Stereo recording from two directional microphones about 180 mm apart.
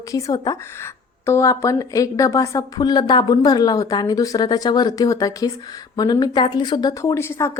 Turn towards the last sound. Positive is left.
turn(degrees=15)  # may be behind; listen again after turning